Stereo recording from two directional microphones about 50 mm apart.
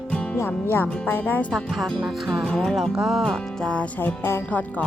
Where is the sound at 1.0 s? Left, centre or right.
Left.